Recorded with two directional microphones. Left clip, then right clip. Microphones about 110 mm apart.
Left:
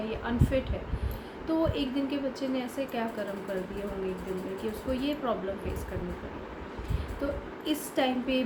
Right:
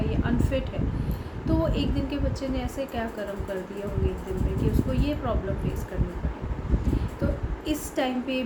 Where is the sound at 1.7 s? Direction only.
5° left (ahead or behind).